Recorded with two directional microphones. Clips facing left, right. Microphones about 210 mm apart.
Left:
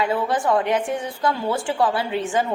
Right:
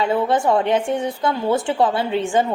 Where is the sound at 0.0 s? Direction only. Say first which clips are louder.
Right 3 dB; 25° right (ahead or behind).